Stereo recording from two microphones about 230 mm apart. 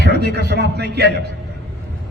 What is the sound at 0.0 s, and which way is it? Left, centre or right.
Speech, right.